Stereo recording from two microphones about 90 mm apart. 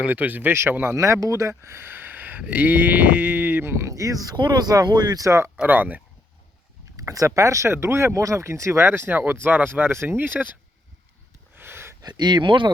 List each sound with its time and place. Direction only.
0.0 s speech: 20° right (ahead or behind); by 4.4 s 40° right (ahead or behind)
4.4 s speech: 55° right (ahead or behind)
5.2 s speech: 35° right (ahead or behind)
5.6 s speech: 20° right (ahead or behind)
6.9 s speech: 40° right (ahead or behind); by 10.4 s 20° right (ahead or behind)
11.5 s a sound: 25° right (ahead or behind)
12.0 s speech: 55° right (ahead or behind)